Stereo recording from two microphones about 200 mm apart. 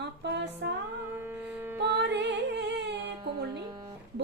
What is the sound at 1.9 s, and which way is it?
Music, 60° right (ahead or behind).